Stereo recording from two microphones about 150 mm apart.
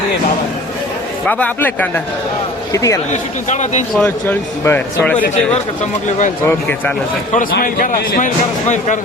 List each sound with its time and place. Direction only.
1.2 s a man's voice: 10° left (ahead or behind)
3.1 s speech: 50° left (ahead or behind)
3.9 s speech: 10° left (ahead or behind)
6.1 s speech: 55° left (ahead or behind)
6.4 s speech: 15° left (ahead or behind)
7.3 s a man's voice: 65° left (ahead or behind)